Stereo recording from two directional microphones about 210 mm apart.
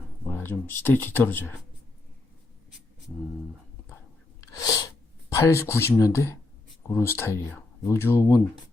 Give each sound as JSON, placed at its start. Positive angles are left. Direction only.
{"t": 0.3, "sound": "speech", "side_deg": 10}
{"t": 4.5, "sound": "sneeze", "side_deg": 15}
{"t": 5.3, "sound": "speech", "side_deg": 15}